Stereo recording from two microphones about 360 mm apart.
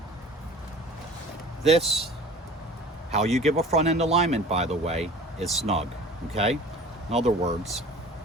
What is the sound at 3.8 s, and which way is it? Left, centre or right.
Speech, centre.